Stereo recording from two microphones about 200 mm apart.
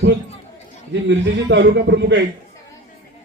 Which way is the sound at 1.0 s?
65° right (ahead or behind).